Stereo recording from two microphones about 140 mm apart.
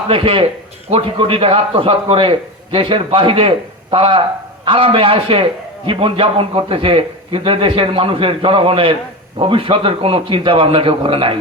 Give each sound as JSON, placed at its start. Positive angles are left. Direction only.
{"t": 0.1, "sound": "a man's voice", "side_deg": -40}